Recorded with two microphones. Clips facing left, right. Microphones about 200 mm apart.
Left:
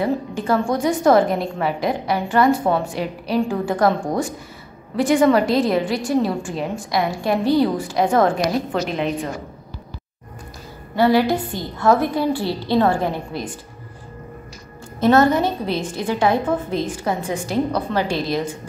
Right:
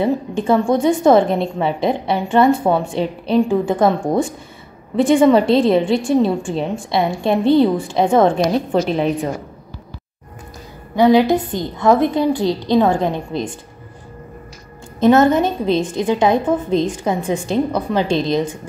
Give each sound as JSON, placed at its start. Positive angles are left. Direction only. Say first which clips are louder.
{"t": 0.0, "sound": "a woman's voice", "louder": "right 4 dB", "side_deg": -20}
{"t": 8.7, "sound": "a woman's voice", "louder": "right 5 dB", "side_deg": -35}
{"t": 11.0, "sound": "a woman's voice", "louder": "right 4 dB", "side_deg": -20}
{"t": 15.0, "sound": "a woman's voice", "louder": "right 3 dB", "side_deg": -20}